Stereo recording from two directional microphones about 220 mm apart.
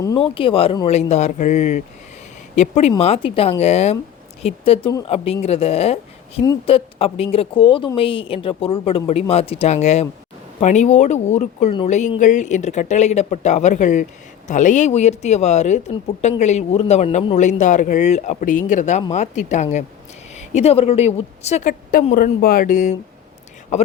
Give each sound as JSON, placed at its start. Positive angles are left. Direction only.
{"t": 0.0, "sound": "a woman's voice", "side_deg": 20}